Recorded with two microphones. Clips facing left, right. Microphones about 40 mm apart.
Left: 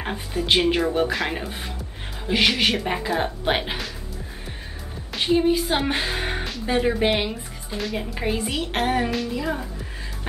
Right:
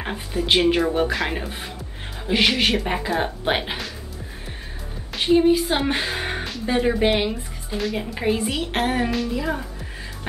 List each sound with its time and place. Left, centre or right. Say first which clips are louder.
0.0 s a woman's voice: right 1 dB; centre
5.1 s a woman's voice: right 3 dB; centre